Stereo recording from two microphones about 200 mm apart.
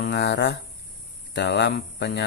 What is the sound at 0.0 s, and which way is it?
A man's voice, 60° left (ahead or behind).